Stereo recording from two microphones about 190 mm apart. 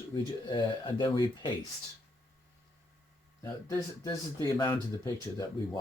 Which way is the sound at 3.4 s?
15° left (ahead or behind).